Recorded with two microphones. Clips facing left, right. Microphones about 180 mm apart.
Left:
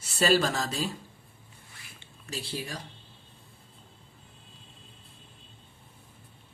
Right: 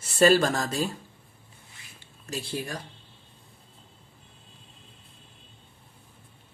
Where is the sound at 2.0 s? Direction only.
45° right (ahead or behind).